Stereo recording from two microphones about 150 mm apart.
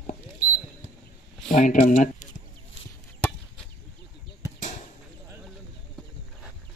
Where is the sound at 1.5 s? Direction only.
55° left (ahead or behind).